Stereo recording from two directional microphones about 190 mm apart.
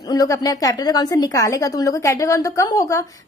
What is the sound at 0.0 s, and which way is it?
A woman's voice, 20° left (ahead or behind).